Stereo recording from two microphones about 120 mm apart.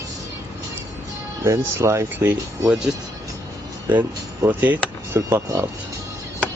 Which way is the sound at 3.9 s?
15° right (ahead or behind).